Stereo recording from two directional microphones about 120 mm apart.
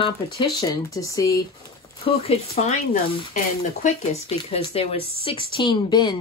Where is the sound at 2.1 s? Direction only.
60° left (ahead or behind).